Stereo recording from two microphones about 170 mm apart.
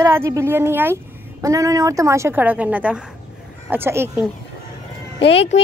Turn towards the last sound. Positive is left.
turn(degrees=90)